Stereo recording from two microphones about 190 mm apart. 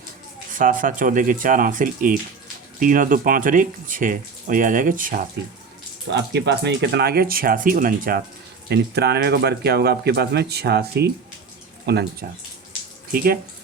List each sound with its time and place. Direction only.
0.5 s speech: 45° right (ahead or behind)
6.1 s speech: 65° right (ahead or behind); by 8.2 s 45° right (ahead or behind)
8.7 s speech: 60° right (ahead or behind)
13.1 s speech: 50° right (ahead or behind)